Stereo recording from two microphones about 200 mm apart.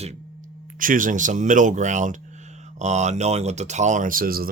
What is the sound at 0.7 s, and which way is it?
Speech, 40° right (ahead or behind).